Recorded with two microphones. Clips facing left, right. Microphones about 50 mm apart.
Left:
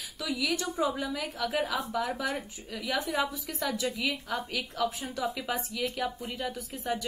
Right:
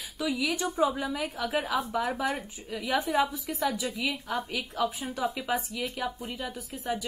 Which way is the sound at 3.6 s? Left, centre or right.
Centre.